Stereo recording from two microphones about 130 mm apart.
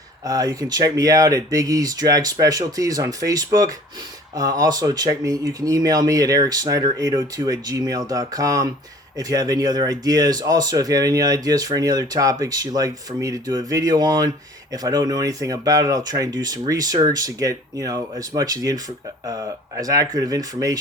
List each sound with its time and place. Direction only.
0.3 s speech: 30° right (ahead or behind)